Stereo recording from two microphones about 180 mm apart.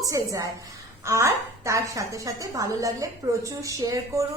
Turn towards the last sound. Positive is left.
turn(degrees=-20)  # may be behind; listen again after turning